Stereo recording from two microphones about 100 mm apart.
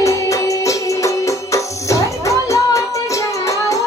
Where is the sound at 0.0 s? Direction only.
30° left (ahead or behind).